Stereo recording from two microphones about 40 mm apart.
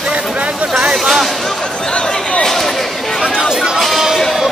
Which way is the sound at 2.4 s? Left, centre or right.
Centre.